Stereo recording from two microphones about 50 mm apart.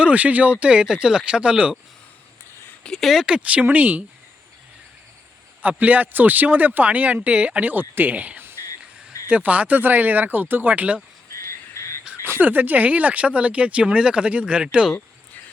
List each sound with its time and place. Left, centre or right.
0.0 s speech: right
3.0 s speech: centre
3.2 s speech: right
5.6 s speech: right
7.7 s speech: right
8.6 s music: left
9.3 s speech: right
11.3 s frog: left
12.4 s speech: right